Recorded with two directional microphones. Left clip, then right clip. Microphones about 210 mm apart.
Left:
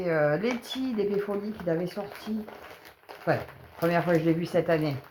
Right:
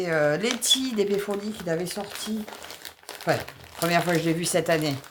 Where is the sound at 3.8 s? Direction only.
40° right (ahead or behind).